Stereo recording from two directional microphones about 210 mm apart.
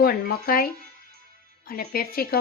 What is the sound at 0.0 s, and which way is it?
Speech, 45° left (ahead or behind).